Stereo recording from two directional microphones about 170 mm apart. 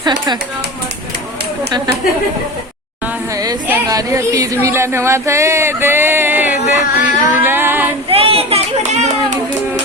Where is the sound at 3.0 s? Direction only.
10° right (ahead or behind).